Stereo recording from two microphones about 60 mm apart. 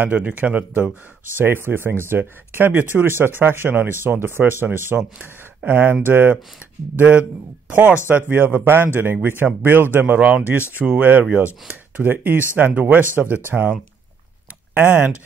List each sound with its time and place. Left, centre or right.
0.0 s speech: right
7.0 s speech: right